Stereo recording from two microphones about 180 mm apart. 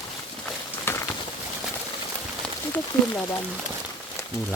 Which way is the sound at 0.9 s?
15° left (ahead or behind).